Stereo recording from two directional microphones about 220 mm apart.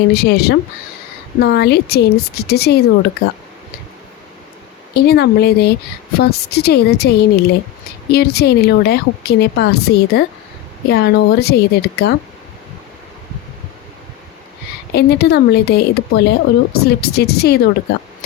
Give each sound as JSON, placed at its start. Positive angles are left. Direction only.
{"t": 0.1, "sound": "a woman's voice", "side_deg": 45}
{"t": 4.9, "sound": "a woman's voice", "side_deg": 45}
{"t": 14.9, "sound": "a woman's voice", "side_deg": 45}